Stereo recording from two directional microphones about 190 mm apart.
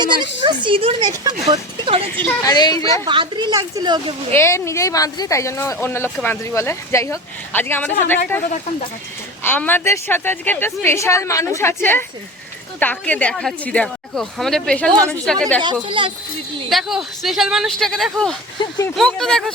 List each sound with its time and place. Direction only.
0.0 s speech: 25° right (ahead or behind)
2.2 s a woman's voice: 20° left (ahead or behind)
3.1 s speech: 25° right (ahead or behind)
4.4 s a woman's voice: 15° left (ahead or behind)
9.4 s a woman's voice: 10° left (ahead or behind)
15.6 s speech: 25° right (ahead or behind)
16.6 s speech: centre (ahead or behind)
18.6 s a woman's voice: 25° left (ahead or behind)
18.9 s speech: 5° left (ahead or behind)